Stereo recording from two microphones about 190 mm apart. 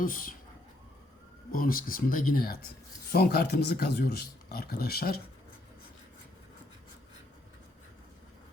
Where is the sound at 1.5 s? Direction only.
50° left (ahead or behind).